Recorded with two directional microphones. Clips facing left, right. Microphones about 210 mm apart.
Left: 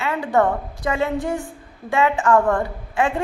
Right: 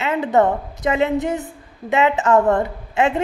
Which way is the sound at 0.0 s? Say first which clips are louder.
Right 2 dB; 20° right (ahead or behind).